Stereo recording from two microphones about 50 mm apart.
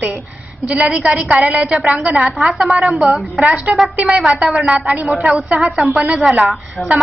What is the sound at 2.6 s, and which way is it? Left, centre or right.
Speech, centre.